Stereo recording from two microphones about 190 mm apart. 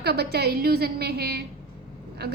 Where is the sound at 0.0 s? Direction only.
55° right (ahead or behind).